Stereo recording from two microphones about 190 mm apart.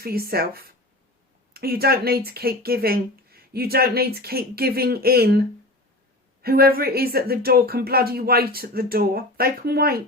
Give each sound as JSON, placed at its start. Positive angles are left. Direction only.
{"t": 0.0, "sound": "speech", "side_deg": -55}